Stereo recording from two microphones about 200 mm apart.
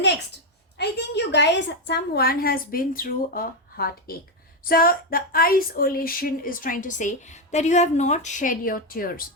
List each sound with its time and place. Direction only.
0.8 s a woman's voice: 60° left (ahead or behind)